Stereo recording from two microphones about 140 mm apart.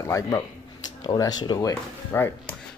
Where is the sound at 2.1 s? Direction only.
15° left (ahead or behind).